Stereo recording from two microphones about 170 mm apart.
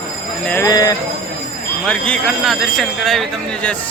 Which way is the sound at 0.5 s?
20° left (ahead or behind).